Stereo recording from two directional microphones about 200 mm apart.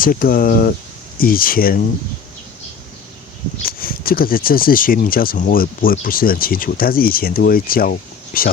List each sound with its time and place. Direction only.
0.0 s speech: 45° left (ahead or behind)
3.6 s speech: 45° left (ahead or behind)